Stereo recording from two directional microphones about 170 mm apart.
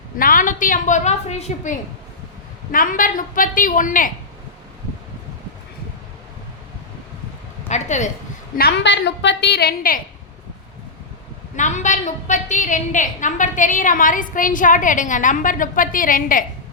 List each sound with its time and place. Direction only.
0.2 s a woman's voice: 55° left (ahead or behind)
7.7 s a woman's voice: 45° left (ahead or behind)
8.5 s a woman's voice: 75° left (ahead or behind); by 10.0 s 60° left (ahead or behind)
11.5 s a woman's voice: 45° left (ahead or behind)